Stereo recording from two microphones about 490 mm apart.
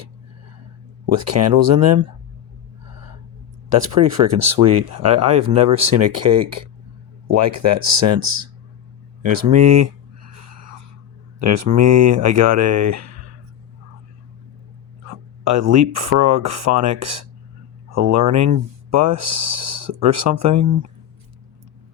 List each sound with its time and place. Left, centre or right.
1.0 s speech: right
3.7 s speech: right
9.6 s speech: right
11.3 s speech: right
15.5 s speech: right